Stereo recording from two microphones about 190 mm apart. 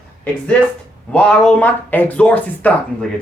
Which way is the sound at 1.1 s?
5° left (ahead or behind).